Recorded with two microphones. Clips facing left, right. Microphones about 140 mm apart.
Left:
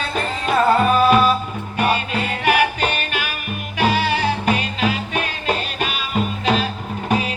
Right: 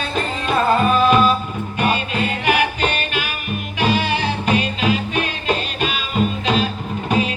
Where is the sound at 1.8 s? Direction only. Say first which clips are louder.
Even; 50° left (ahead or behind).